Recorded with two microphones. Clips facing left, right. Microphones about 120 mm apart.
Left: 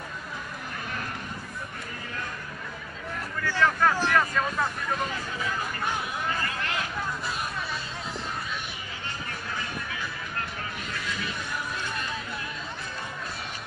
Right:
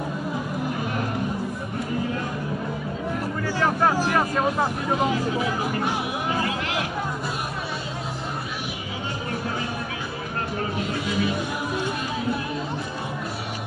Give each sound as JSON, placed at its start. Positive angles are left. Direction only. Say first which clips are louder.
{"t": 3.6, "sound": "vehicle", "louder": "right 2 dB", "side_deg": -25}
{"t": 4.0, "sound": "speech", "louder": "right 3 dB", "side_deg": -20}
{"t": 6.2, "sound": "a sound", "louder": "right 5 dB", "side_deg": -15}